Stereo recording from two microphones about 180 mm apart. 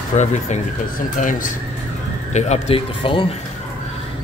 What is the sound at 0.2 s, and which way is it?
Speech, 40° left (ahead or behind).